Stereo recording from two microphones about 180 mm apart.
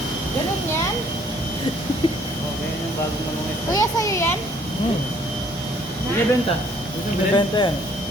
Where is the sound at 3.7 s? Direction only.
15° left (ahead or behind).